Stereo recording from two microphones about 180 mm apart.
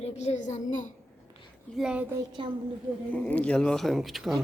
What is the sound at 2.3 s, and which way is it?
Speech, 25° right (ahead or behind).